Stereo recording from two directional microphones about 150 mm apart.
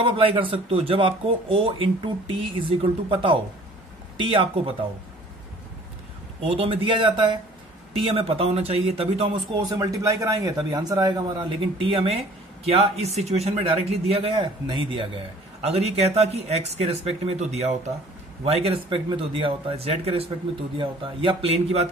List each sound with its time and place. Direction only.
0.0 s speech: 35° right (ahead or behind)
6.4 s speech: 40° right (ahead or behind)